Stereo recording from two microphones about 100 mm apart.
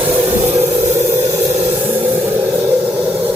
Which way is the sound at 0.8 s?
30° right (ahead or behind).